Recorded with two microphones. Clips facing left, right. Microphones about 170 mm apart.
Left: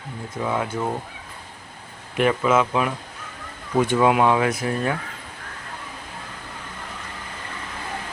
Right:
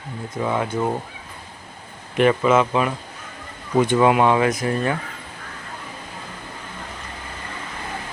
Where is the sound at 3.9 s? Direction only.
Centre (ahead or behind).